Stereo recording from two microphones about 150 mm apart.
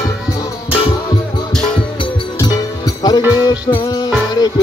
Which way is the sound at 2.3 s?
25° left (ahead or behind).